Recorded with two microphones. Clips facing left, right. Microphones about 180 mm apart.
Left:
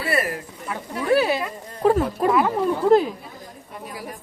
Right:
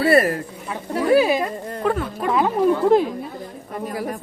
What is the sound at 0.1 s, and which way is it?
Speech, 40° right (ahead or behind).